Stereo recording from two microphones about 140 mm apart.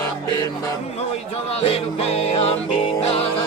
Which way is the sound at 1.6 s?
45° left (ahead or behind).